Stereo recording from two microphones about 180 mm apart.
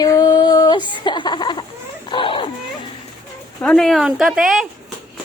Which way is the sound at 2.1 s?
30° left (ahead or behind).